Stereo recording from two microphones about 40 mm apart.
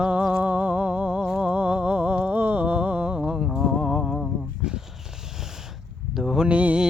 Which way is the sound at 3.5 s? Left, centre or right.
Centre.